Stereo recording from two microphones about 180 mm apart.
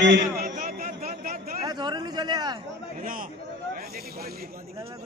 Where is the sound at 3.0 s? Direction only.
50° right (ahead or behind).